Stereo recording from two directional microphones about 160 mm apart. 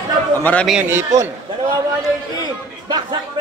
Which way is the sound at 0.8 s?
15° right (ahead or behind).